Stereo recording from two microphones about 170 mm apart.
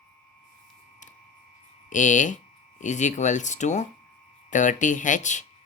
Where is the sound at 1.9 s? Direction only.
50° left (ahead or behind).